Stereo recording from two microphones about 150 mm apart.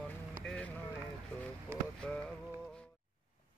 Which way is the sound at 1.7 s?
15° right (ahead or behind).